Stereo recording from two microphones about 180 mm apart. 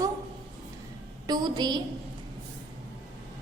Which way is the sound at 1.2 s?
25° right (ahead or behind).